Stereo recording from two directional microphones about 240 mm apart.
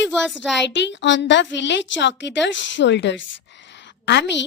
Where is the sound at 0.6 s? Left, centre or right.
Left.